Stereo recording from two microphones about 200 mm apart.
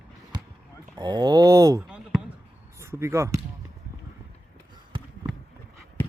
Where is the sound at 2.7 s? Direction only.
15° right (ahead or behind).